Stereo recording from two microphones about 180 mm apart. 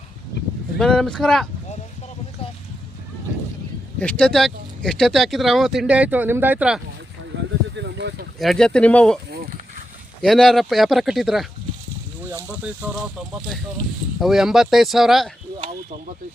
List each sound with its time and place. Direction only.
0.8 s speech: 5° left (ahead or behind)
4.0 s speech: 5° left (ahead or behind)
7.3 s a sound: 75° right (ahead or behind)
8.4 s speech: centre (ahead or behind)
10.2 s speech: centre (ahead or behind)
14.2 s speech: centre (ahead or behind)